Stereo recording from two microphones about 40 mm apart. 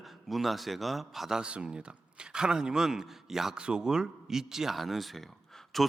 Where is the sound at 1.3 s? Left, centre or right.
Right; by 3.5 s centre.